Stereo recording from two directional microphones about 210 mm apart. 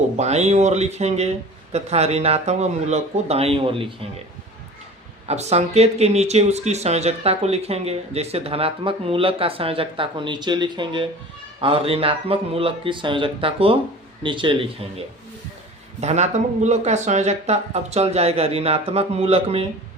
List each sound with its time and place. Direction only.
0.2 s speech: 30° right (ahead or behind)
5.3 s speech: 30° right (ahead or behind)